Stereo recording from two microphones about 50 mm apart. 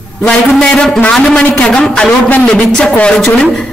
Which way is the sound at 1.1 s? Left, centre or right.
Centre.